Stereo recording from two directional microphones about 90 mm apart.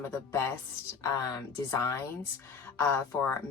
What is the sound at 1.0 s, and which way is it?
Speech, 40° left (ahead or behind).